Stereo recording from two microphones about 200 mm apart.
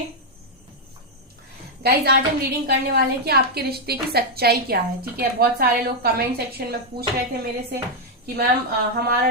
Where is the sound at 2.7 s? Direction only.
50° right (ahead or behind).